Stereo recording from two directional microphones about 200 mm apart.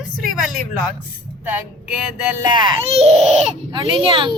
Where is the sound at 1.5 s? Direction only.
5° right (ahead or behind).